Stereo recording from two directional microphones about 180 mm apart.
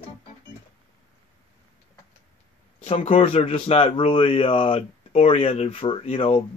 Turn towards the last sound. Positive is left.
turn(degrees=30)  # may be behind; listen again after turning